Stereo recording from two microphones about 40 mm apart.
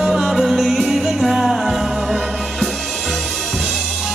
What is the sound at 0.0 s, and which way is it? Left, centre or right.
Music, centre.